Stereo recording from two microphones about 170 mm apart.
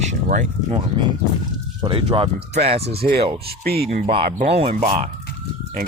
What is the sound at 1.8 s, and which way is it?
Speech, 30° right (ahead or behind).